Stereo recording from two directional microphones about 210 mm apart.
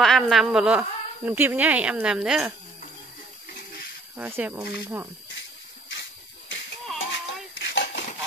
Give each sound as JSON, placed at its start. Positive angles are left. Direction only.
{"t": 0.0, "sound": "a woman's voice", "side_deg": 0}
{"t": 4.2, "sound": "speech", "side_deg": -10}
{"t": 7.1, "sound": "a sound", "side_deg": 60}